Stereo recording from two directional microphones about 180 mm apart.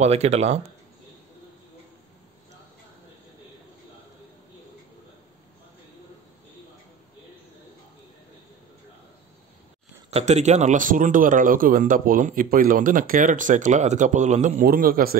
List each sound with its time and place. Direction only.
0.0 s speech: 35° right (ahead or behind)
10.1 s speech: 40° right (ahead or behind)
14.7 s speech: 50° right (ahead or behind)